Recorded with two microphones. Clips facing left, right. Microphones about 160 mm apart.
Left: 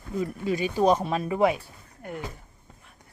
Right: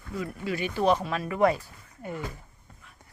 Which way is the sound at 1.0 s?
25° left (ahead or behind).